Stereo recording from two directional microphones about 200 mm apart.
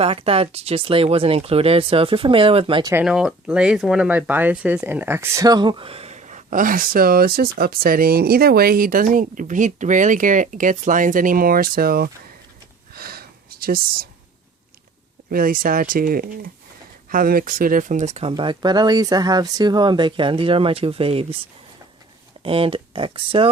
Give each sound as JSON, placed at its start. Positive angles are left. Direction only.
{"t": 0.0, "sound": "speech", "side_deg": -30}
{"t": 2.9, "sound": "speech", "side_deg": -5}
{"t": 12.9, "sound": "a sound", "side_deg": -50}
{"t": 15.3, "sound": "speech", "side_deg": -45}
{"t": 22.4, "sound": "speech", "side_deg": -25}